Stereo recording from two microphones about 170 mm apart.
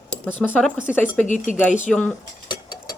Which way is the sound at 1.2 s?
45° left (ahead or behind).